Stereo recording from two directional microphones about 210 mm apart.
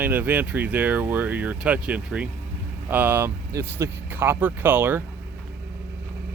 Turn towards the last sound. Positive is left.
turn(degrees=-10)  # may be behind; listen again after turning